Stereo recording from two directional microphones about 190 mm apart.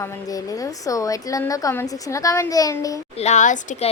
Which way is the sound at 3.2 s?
40° left (ahead or behind).